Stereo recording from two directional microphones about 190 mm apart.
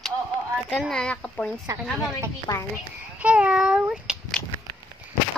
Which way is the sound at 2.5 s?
20° left (ahead or behind).